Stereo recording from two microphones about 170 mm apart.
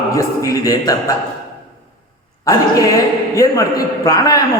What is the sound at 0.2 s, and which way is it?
Speech, 20° left (ahead or behind).